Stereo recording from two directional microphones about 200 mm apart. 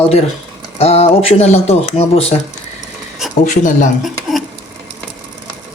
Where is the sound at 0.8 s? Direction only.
30° left (ahead or behind).